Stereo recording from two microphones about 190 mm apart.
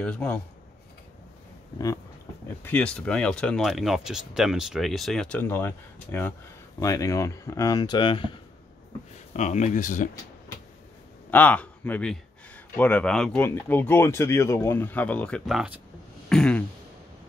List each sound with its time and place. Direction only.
0.0 s speech: 5° left (ahead or behind)
2.4 s speech: 10° left (ahead or behind); by 8.3 s 25° left (ahead or behind)
9.3 s speech: 40° left (ahead or behind)
11.2 s speech: 10° left (ahead or behind)
16.3 s a sound: 5° left (ahead or behind)